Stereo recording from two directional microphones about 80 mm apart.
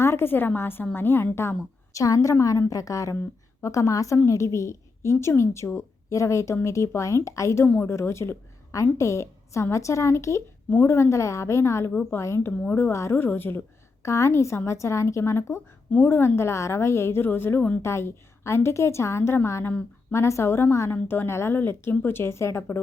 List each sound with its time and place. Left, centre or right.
0.0 s a woman's voice: left
10.7 s a woman's voice: left
10.9 s a woman's voice: left
14.0 s a woman's voice: left
15.9 s a woman's voice: left
19.6 s speech: left
20.1 s a woman's voice: left